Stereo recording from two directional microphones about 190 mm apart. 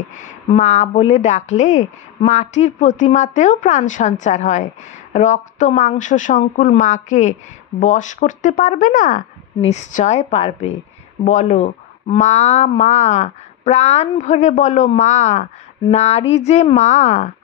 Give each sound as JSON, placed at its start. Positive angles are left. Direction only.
{"t": 0.5, "sound": "a woman's voice", "side_deg": 40}